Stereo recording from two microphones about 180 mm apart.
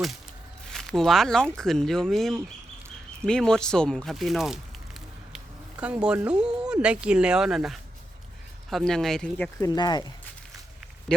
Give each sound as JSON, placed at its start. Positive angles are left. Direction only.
{"t": 0.7, "sound": "speech", "side_deg": 0}
{"t": 9.6, "sound": "speech", "side_deg": 20}